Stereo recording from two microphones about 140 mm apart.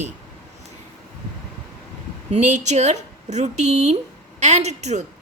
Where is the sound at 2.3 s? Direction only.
55° right (ahead or behind).